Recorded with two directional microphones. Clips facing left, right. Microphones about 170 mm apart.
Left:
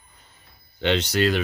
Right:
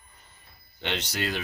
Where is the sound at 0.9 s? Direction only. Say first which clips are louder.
Left 10 dB; 75° left (ahead or behind).